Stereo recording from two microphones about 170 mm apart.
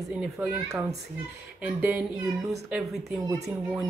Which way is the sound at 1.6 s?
5° right (ahead or behind).